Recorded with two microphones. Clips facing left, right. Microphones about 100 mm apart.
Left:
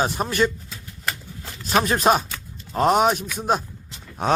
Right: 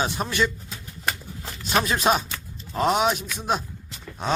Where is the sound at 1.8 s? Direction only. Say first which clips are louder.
Left 4 dB; 40° left (ahead or behind).